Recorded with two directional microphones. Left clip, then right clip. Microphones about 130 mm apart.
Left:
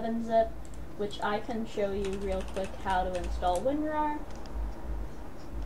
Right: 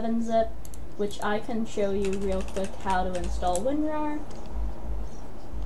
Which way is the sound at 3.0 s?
25° right (ahead or behind).